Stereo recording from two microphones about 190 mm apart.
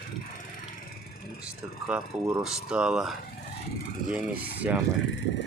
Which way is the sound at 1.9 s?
5° right (ahead or behind).